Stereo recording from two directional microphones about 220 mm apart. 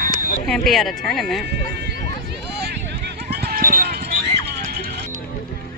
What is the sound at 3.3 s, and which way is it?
Run, 45° right (ahead or behind).